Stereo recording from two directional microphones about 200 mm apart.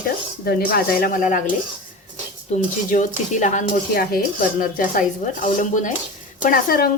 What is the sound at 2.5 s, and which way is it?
Speech, 40° left (ahead or behind).